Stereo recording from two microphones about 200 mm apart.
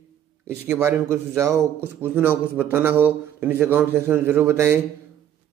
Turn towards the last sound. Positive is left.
turn(degrees=-15)  # may be behind; listen again after turning